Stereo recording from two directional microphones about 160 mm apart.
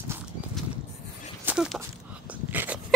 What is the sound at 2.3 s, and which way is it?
Dog, 10° right (ahead or behind).